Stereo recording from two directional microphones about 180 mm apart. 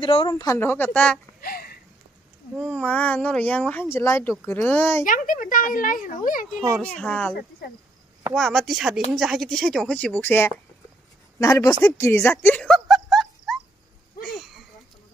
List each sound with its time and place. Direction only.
0.0 s speech: 30° left (ahead or behind)
0.3 s speech: 15° left (ahead or behind)
1.4 s sniff: 55° left (ahead or behind)
2.5 s speech: centre (ahead or behind)
5.0 s speech: 50° left (ahead or behind)
6.8 s speech: 5° left (ahead or behind)
14.2 s a sound: centre (ahead or behind)